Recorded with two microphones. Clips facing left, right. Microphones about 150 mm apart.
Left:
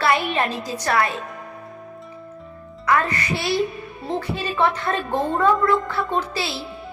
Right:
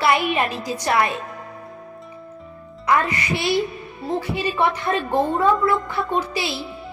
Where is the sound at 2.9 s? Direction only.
15° right (ahead or behind).